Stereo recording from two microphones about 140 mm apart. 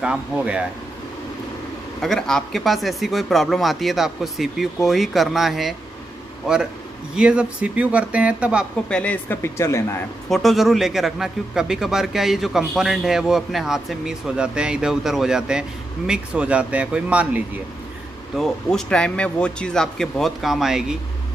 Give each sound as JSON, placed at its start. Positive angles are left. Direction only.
{"t": 0.0, "sound": "speech", "side_deg": -5}
{"t": 2.0, "sound": "a man's voice", "side_deg": 5}
{"t": 8.8, "sound": "speech", "side_deg": 10}
{"t": 10.3, "sound": "a man's voice", "side_deg": 0}
{"t": 18.3, "sound": "a man's voice", "side_deg": 0}